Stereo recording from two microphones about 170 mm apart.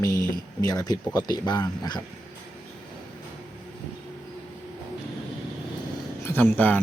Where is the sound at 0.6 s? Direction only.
20° left (ahead or behind).